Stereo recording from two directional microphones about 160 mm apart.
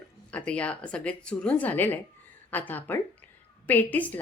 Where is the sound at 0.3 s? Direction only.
10° left (ahead or behind).